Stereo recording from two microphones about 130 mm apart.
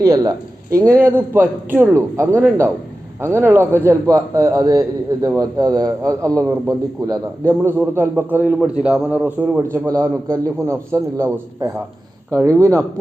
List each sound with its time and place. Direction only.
0.0 s a man's voice: 30° right (ahead or behind); by 9.6 s 10° right (ahead or behind)
9.7 s a man's voice: 25° right (ahead or behind)